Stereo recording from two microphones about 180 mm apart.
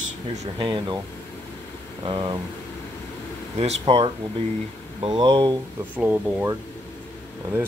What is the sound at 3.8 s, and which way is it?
Speech, 30° right (ahead or behind).